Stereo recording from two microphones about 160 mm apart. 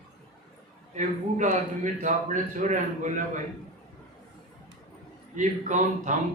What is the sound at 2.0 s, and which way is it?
A man's voice, 50° right (ahead or behind).